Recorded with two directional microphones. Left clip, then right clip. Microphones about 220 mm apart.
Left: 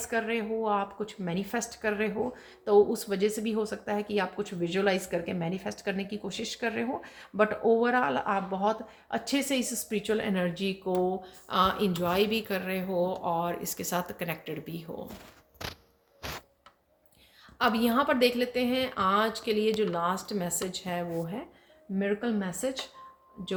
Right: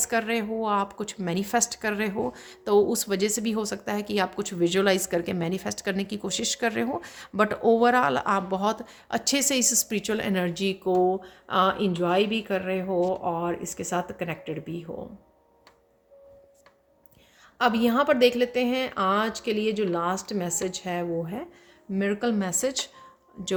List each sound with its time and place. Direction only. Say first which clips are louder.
0.0 s a woman's voice: right 4 dB; 45° right (ahead or behind); by 14.8 s 30° right (ahead or behind)
17.6 s speech: right 3 dB; 30° right (ahead or behind)
21.9 s a woman's voice: right 4 dB; 45° right (ahead or behind)